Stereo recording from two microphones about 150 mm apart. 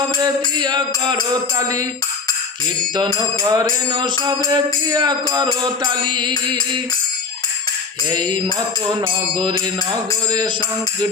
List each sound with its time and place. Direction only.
0.2 s music: 30° right (ahead or behind)
2.9 s music: 30° right (ahead or behind)
8.1 s music: 30° right (ahead or behind)